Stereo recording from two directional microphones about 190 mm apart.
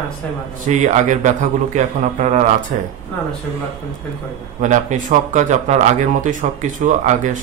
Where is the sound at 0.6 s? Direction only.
40° right (ahead or behind).